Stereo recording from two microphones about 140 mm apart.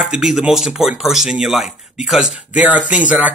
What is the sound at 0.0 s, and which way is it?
Speech, centre (ahead or behind).